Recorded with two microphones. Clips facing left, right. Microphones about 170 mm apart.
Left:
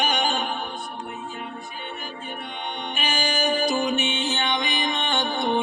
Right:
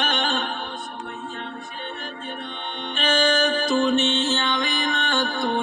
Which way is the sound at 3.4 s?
15° left (ahead or behind).